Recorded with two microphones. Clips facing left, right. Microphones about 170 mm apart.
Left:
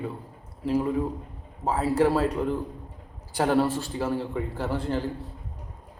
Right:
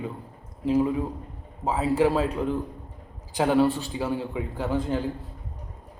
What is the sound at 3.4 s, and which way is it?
A man's voice, 15° right (ahead or behind).